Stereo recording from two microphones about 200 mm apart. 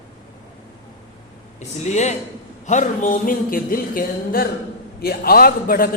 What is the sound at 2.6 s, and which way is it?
A man's voice, 35° left (ahead or behind).